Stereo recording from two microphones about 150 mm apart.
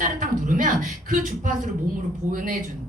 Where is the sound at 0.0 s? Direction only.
60° right (ahead or behind).